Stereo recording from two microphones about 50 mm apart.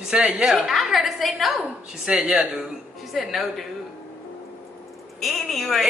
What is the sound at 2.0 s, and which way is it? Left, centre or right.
Speech, centre.